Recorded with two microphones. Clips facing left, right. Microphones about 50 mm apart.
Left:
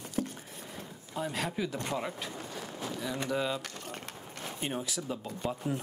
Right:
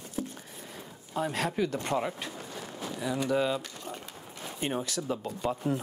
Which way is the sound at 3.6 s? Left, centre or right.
Left.